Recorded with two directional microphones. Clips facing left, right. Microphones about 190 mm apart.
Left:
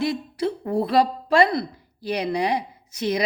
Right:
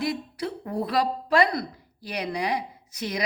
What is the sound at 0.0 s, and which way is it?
A woman's voice, 25° left (ahead or behind).